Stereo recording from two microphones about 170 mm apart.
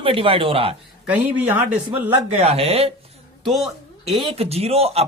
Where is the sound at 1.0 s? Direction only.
10° right (ahead or behind).